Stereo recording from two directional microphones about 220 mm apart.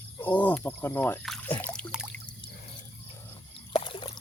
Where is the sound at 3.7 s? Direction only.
25° left (ahead or behind).